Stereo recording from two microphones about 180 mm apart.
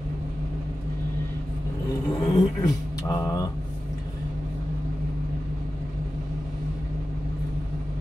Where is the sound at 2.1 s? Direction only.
20° left (ahead or behind).